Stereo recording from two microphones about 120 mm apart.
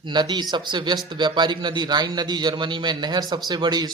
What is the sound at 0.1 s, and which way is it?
A man's voice, 40° right (ahead or behind).